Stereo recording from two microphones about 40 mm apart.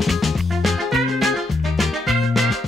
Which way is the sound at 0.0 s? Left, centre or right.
Centre.